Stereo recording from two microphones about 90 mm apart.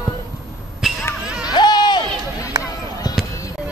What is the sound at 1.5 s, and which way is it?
Run, 55° left (ahead or behind).